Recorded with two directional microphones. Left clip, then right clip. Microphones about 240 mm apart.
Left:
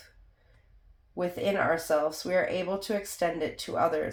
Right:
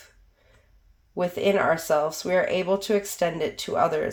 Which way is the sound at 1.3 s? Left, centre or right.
Right.